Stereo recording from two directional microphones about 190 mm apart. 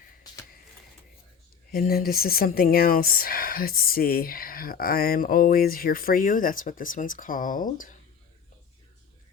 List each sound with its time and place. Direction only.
1.7 s speech: 50° left (ahead or behind)